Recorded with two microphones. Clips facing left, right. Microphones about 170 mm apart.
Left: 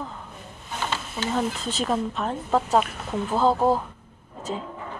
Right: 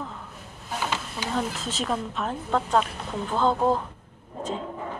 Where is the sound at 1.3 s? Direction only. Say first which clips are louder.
Left 2 dB; centre (ahead or behind).